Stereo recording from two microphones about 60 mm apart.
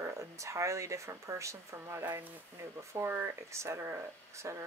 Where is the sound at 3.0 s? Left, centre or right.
Right.